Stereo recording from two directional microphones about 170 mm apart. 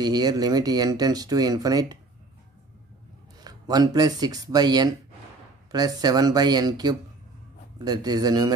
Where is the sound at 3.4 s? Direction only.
25° right (ahead or behind).